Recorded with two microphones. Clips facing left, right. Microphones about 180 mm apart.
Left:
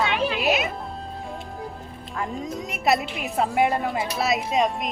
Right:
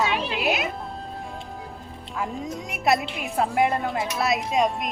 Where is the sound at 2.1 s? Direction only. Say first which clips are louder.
Even; centre (ahead or behind).